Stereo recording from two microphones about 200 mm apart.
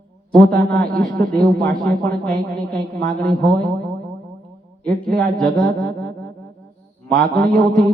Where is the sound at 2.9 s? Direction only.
50° right (ahead or behind).